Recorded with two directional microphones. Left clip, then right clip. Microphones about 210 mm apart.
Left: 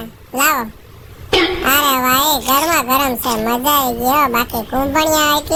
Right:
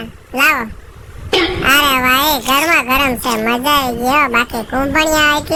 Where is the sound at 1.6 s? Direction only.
30° right (ahead or behind).